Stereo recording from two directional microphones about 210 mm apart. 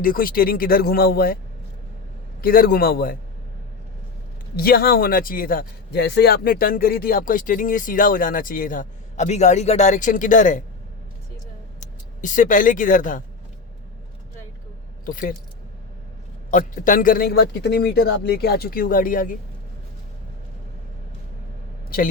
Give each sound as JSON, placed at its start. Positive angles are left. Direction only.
{"t": 0.0, "sound": "a man's voice", "side_deg": 45}
{"t": 2.4, "sound": "a man's voice", "side_deg": 45}
{"t": 4.5, "sound": "a man's voice", "side_deg": 45}
{"t": 11.8, "sound": "speech", "side_deg": 35}
{"t": 15.0, "sound": "speech", "side_deg": 40}
{"t": 16.5, "sound": "a man's voice", "side_deg": 40}
{"t": 21.8, "sound": "speech", "side_deg": 45}